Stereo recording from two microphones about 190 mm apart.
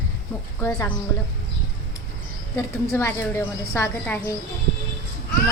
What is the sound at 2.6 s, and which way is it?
A woman's voice, 15° left (ahead or behind).